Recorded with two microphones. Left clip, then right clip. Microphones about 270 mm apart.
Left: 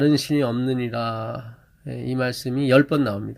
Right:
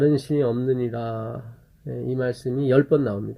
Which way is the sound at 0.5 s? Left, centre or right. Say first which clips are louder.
Right 1 dB; left.